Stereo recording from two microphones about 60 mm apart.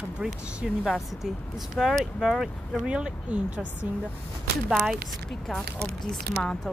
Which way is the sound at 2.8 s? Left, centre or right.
Centre.